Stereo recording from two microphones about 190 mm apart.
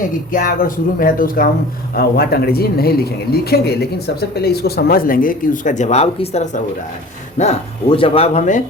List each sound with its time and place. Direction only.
0.3 s speech: 45° left (ahead or behind)